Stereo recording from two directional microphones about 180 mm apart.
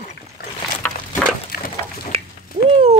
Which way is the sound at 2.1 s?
30° right (ahead or behind).